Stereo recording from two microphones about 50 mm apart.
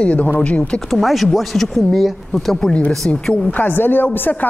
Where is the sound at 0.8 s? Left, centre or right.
Centre.